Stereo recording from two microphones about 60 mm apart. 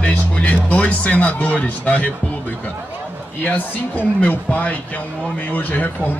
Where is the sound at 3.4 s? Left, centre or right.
Left.